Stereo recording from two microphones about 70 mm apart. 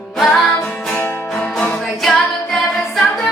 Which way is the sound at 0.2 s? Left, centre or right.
Centre.